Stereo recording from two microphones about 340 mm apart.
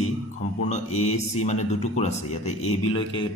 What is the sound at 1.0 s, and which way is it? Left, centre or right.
A man's voice, centre.